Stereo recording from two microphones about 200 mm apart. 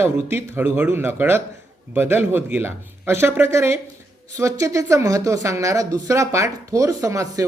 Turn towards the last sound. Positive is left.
turn(degrees=-15)  # may be behind; listen again after turning